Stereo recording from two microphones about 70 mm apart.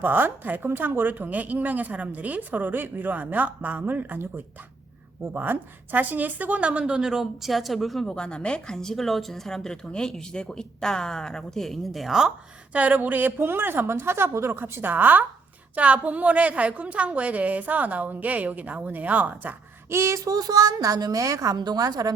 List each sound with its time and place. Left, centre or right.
0.0 s speech: right
5.3 s speech: right; by 8.0 s centre
8.0 s speech: centre
12.7 s speech: right
19.9 s a woman's voice: right
21.5 s a woman's voice: right